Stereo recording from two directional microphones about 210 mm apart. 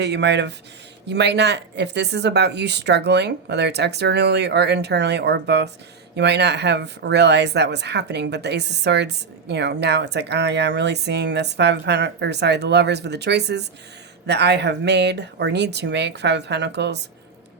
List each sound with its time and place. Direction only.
0.0 s speech: 55° right (ahead or behind)